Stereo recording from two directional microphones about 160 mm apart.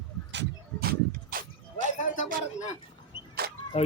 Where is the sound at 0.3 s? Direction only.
80° right; by 1.9 s 65° right (ahead or behind).